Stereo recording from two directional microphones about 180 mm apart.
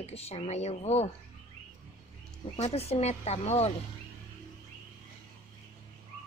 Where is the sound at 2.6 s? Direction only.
35° left (ahead or behind).